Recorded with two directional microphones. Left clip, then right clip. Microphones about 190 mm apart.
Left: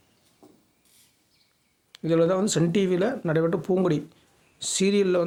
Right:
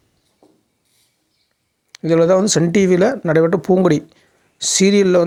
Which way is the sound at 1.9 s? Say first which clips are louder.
Right 9 dB; 35° right (ahead or behind).